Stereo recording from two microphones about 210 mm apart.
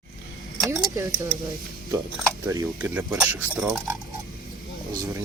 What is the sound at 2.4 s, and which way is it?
Speech, 10° right (ahead or behind).